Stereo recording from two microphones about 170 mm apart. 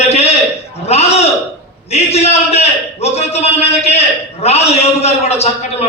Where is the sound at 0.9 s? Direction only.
40° left (ahead or behind).